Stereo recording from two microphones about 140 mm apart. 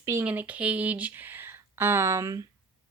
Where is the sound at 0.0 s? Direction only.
15° right (ahead or behind).